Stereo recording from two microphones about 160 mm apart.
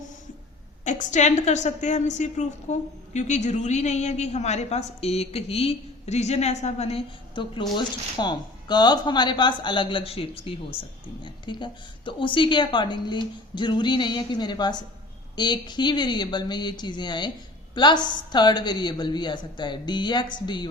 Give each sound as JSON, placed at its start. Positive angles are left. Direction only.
{"t": 0.9, "sound": "a woman's voice", "side_deg": 50}